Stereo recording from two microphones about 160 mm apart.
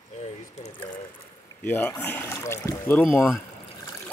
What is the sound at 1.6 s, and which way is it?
Speech, 10° left (ahead or behind).